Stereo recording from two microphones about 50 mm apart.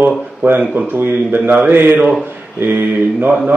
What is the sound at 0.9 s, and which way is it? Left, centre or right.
A man's voice, right.